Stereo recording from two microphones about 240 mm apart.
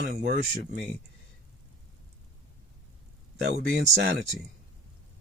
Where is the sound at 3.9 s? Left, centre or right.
Right.